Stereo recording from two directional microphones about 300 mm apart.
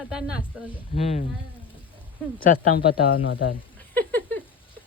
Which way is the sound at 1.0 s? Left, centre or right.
Centre.